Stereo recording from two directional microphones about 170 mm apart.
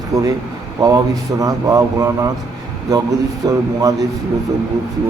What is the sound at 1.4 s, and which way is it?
Speech, 20° right (ahead or behind).